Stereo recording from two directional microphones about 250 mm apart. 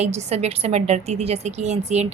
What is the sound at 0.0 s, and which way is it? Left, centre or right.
A woman's voice, right.